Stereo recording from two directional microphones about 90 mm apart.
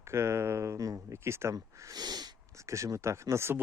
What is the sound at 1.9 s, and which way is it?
Sneeze, 50° right (ahead or behind).